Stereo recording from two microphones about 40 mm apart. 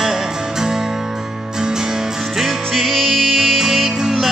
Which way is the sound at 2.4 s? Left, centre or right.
Centre.